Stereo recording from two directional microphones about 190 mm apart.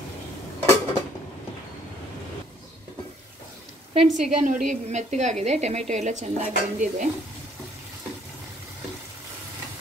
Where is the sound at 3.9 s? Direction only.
40° right (ahead or behind).